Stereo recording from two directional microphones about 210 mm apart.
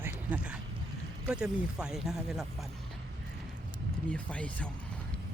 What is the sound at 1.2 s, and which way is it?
Speech, 5° right (ahead or behind).